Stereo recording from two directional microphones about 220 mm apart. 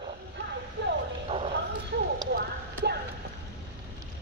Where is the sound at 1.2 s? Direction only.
30° right (ahead or behind).